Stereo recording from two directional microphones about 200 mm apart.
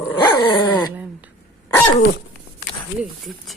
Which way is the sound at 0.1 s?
20° left (ahead or behind).